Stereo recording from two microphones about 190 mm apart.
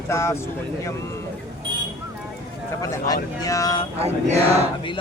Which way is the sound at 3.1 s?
20° left (ahead or behind).